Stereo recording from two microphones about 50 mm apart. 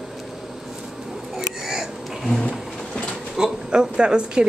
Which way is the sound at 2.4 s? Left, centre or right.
Centre.